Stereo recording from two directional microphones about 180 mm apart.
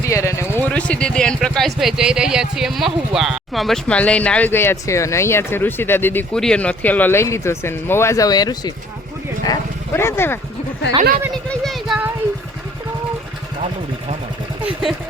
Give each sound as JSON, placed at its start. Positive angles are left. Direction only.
{"t": 0.0, "sound": "speech", "side_deg": 15}
{"t": 11.4, "sound": "a sound", "side_deg": 0}
{"t": 14.6, "sound": "vehicle", "side_deg": 0}